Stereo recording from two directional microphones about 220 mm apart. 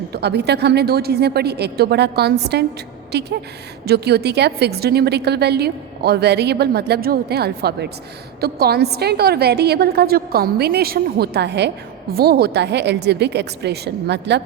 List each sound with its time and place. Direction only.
0.1 s a woman's voice: 50° right (ahead or behind)